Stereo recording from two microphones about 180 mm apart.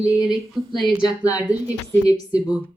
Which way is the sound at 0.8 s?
5° right (ahead or behind).